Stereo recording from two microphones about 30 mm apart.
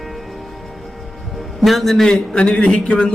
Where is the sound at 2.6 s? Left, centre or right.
Left.